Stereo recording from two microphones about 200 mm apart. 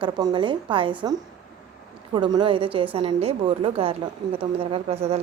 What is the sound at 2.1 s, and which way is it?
A woman's voice, 20° right (ahead or behind).